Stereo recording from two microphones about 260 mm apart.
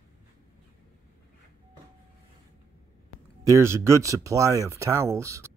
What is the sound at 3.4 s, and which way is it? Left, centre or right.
Speech, centre.